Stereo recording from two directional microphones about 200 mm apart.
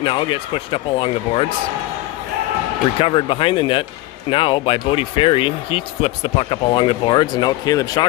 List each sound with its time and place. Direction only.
0.0 s speech: 25° left (ahead or behind)
3.0 s speech: 25° left (ahead or behind)